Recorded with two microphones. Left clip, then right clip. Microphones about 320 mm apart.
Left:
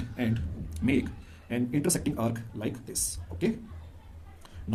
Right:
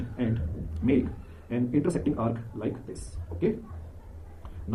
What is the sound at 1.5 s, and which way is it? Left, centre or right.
Speech, left.